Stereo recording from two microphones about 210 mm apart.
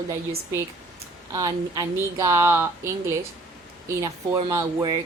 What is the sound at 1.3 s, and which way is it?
Speech, 20° right (ahead or behind).